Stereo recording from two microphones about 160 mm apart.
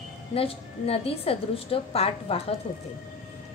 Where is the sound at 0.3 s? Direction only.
35° left (ahead or behind).